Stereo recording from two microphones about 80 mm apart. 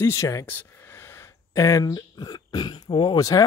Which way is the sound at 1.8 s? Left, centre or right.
Left.